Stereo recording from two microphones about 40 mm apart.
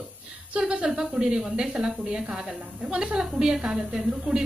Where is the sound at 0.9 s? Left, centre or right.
Centre.